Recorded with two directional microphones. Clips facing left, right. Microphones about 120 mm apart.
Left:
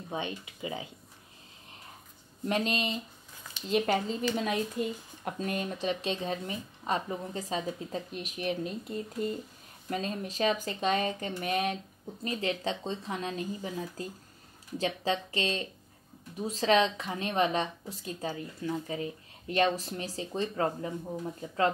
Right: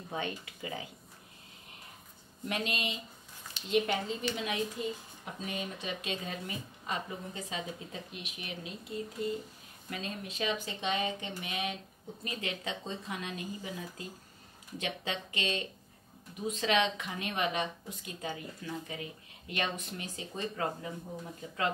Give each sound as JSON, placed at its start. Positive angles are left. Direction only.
{"t": 0.1, "sound": "speech", "side_deg": 20}
{"t": 2.4, "sound": "a woman's voice", "side_deg": 35}
{"t": 5.8, "sound": "a woman's voice", "side_deg": 35}
{"t": 12.3, "sound": "a woman's voice", "side_deg": 30}